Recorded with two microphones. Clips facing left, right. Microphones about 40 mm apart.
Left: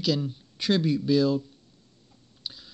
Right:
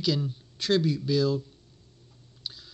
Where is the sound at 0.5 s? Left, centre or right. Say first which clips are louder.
Left 1 dB; centre.